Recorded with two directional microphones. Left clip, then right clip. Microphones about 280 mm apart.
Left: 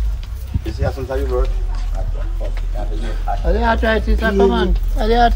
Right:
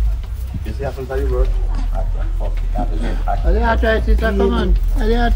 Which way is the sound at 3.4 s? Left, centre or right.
Left.